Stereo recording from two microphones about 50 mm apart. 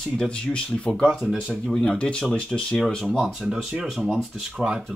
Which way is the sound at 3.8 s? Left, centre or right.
Centre.